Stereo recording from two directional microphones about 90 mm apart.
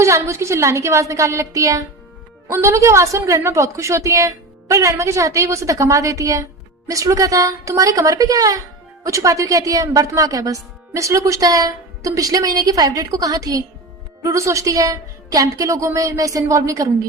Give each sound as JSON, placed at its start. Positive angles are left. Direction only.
{"t": 0.3, "sound": "a woman's voice", "side_deg": -35}